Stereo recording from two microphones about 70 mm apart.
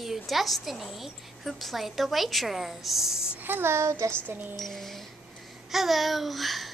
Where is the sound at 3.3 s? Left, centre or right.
Right.